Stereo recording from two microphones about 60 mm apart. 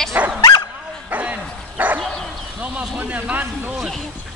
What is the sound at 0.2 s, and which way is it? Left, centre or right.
Dog, right.